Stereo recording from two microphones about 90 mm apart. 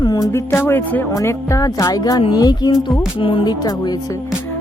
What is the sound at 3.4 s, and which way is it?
Speech, 50° left (ahead or behind).